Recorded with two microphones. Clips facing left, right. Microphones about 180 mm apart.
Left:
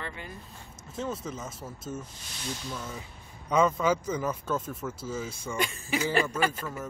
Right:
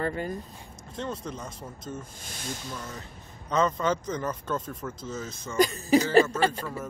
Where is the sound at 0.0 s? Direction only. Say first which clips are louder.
Right 10 dB; 45° right (ahead or behind).